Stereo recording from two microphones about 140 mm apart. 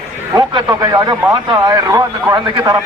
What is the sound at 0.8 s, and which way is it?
A man's voice, 25° right (ahead or behind).